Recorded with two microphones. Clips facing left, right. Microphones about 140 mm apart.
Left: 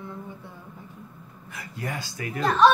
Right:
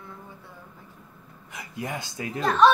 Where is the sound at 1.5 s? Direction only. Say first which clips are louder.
Right 1 dB; 20° right (ahead or behind).